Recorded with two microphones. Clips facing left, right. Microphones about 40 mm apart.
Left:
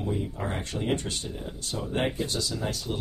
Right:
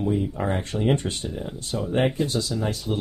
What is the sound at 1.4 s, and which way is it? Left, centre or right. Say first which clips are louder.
Speech: right 5 dB; centre.